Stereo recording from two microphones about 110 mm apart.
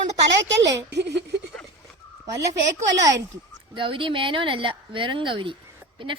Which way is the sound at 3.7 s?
50° right (ahead or behind).